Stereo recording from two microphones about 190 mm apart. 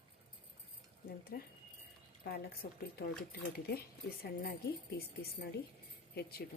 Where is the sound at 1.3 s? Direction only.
55° left (ahead or behind).